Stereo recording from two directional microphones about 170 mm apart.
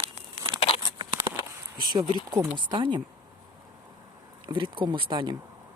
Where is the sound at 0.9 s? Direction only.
30° right (ahead or behind).